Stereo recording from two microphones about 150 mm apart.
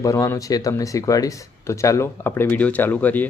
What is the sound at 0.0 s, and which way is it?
Speech, 20° left (ahead or behind).